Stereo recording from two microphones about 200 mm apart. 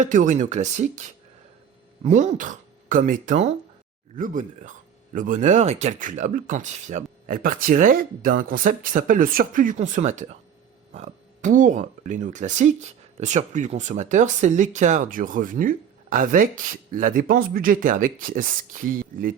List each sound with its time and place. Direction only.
0.0 s speech: 40° right (ahead or behind)